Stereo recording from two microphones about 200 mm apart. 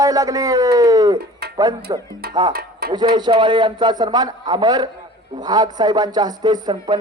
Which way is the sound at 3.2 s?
25° right (ahead or behind).